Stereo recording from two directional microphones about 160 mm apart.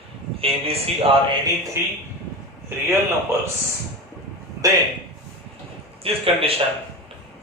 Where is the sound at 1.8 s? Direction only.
15° right (ahead or behind).